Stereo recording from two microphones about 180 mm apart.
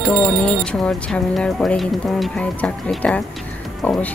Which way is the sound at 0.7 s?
5° left (ahead or behind).